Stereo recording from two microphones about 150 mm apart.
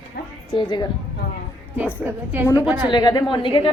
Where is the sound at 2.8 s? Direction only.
30° left (ahead or behind).